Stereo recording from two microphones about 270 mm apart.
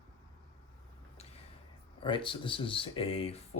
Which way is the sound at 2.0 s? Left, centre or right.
Centre.